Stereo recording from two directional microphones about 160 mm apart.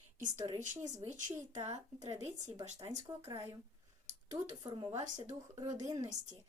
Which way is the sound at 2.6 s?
45° right (ahead or behind).